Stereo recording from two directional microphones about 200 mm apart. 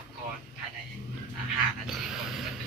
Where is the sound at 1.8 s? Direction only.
Centre (ahead or behind).